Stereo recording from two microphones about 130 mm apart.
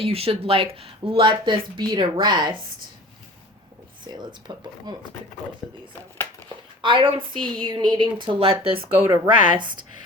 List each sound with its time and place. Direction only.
0.0 s speech: 50° right (ahead or behind)
4.0 s speech: 35° right (ahead or behind)
6.8 s speech: 40° right (ahead or behind)
9.0 s speech: 15° right (ahead or behind)
9.6 s speech: 35° right (ahead or behind)